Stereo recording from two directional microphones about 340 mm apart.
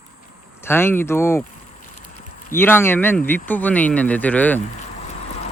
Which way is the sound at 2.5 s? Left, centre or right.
Centre.